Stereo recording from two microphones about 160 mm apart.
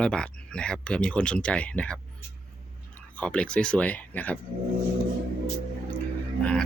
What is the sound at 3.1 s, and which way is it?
A man's voice, 5° left (ahead or behind).